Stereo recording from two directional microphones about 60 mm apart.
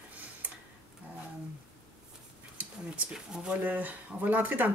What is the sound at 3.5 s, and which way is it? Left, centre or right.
Speech, right.